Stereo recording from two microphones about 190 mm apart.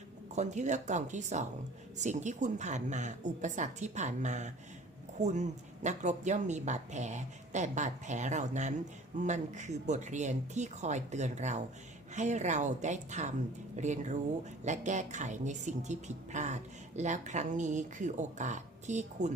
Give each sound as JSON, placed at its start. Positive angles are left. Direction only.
{"t": 0.3, "sound": "a woman's voice", "side_deg": -40}